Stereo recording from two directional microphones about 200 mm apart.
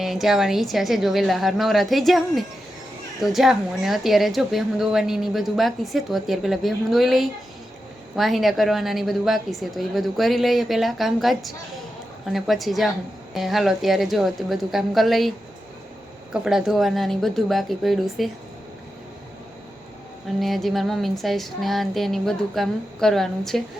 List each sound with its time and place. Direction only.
0.0 s a woman's voice: centre (ahead or behind)
16.3 s a woman's voice: 5° right (ahead or behind)
20.2 s a woman's voice: centre (ahead or behind)